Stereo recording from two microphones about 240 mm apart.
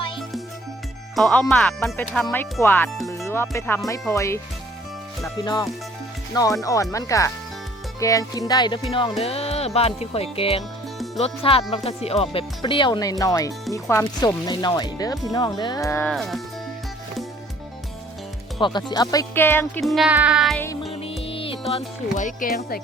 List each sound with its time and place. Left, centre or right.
1.1 s speech: centre
7.9 s music: centre
13.7 s speech: centre
18.6 s speech: centre
20.9 s music: left
21.7 s speech: left